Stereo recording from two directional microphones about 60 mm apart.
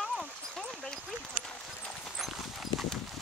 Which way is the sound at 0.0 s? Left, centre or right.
Centre.